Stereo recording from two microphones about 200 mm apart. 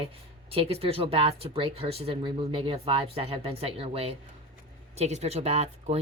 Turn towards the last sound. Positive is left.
turn(degrees=-35)  # may be behind; listen again after turning